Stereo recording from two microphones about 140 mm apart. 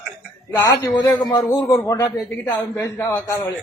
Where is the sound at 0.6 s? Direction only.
25° left (ahead or behind).